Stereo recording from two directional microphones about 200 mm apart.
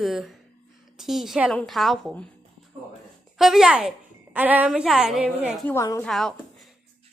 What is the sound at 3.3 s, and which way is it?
A woman's voice, centre (ahead or behind).